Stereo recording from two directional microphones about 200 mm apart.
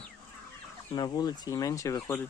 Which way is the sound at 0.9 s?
20° left (ahead or behind).